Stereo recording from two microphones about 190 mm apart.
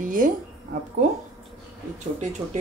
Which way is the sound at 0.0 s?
45° right (ahead or behind).